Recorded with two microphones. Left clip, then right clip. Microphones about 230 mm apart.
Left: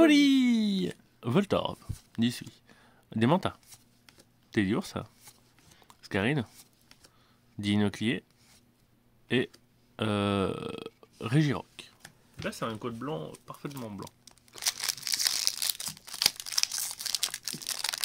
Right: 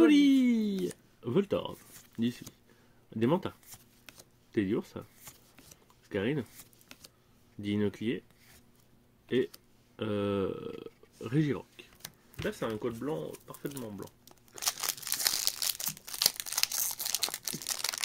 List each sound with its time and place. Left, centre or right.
0.0 s a sound: left
3.1 s speech: left
6.0 s speech: left
7.6 s speech: left
9.9 s speech: left
14.3 s a sound: centre